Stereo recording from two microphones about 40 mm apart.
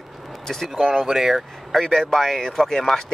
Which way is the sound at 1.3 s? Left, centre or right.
Centre.